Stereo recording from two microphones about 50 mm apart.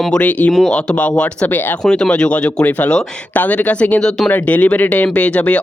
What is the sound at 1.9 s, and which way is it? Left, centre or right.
Speech, centre.